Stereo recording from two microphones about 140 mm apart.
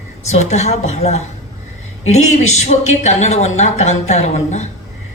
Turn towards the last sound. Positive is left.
turn(degrees=55)  # may be behind; listen again after turning